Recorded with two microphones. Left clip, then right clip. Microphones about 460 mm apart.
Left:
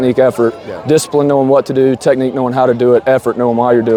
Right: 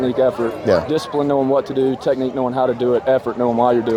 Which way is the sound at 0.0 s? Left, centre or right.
Left.